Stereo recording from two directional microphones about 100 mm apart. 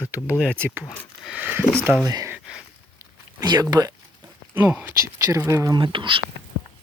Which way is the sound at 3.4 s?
45° right (ahead or behind).